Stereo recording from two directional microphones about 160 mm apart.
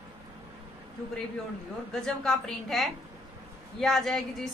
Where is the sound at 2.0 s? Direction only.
Centre (ahead or behind).